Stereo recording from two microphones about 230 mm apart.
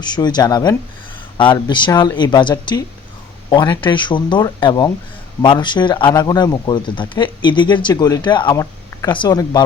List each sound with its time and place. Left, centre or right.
0.0 s speech: centre